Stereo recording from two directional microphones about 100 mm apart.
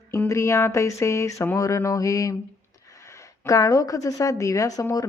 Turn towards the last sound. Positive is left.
turn(degrees=35)  # may be behind; listen again after turning